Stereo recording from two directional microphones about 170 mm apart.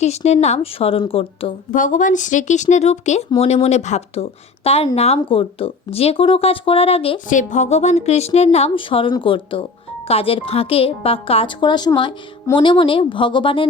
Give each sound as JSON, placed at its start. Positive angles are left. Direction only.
{"t": 0.0, "sound": "speech", "side_deg": 40}
{"t": 1.7, "sound": "speech", "side_deg": 50}
{"t": 7.3, "sound": "speech", "side_deg": 45}